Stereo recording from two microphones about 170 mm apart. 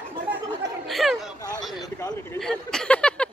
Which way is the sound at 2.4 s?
5° left (ahead or behind).